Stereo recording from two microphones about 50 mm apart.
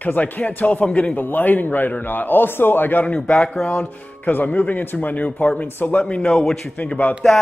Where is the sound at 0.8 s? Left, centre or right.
Centre.